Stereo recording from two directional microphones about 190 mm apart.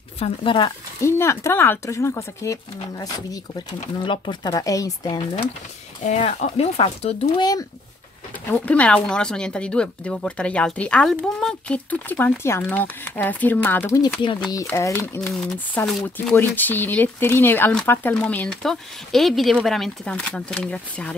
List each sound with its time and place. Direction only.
0.2 s speech: 25° left (ahead or behind)
1.0 s speech: 15° left (ahead or behind)
6.0 s speech: 40° left (ahead or behind)
8.5 s speech: 10° left (ahead or behind)